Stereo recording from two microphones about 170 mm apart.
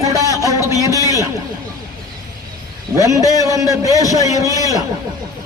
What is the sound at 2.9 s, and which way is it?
A man's voice, 20° right (ahead or behind).